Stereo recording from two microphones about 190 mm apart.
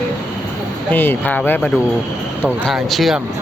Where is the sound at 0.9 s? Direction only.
10° left (ahead or behind).